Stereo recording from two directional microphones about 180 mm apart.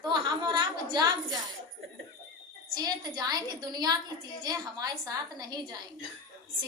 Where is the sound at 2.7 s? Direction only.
20° right (ahead or behind).